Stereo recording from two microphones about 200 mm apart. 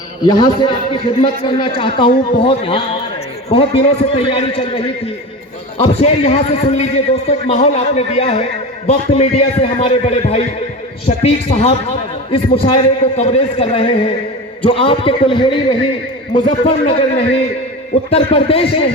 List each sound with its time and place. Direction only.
0.3 s a man's voice: 20° left (ahead or behind)